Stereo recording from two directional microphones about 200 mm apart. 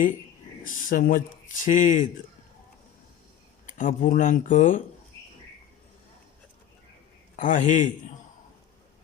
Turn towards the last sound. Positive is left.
turn(degrees=40)  # may be behind; listen again after turning